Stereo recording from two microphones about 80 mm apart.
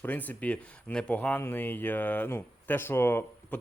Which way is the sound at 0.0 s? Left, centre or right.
Left.